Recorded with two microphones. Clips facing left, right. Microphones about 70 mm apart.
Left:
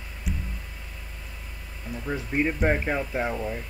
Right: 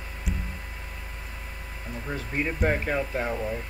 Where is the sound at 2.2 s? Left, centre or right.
Centre.